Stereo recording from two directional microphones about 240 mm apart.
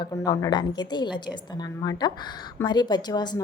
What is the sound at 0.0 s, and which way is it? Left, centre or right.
A woman's voice, centre.